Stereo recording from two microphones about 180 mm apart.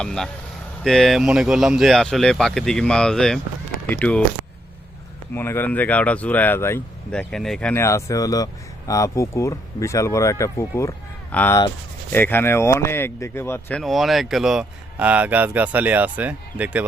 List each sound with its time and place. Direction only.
0.0 s speech: 5° left (ahead or behind)
5.3 s speech: 10° left (ahead or behind); by 16.8 s 10° right (ahead or behind)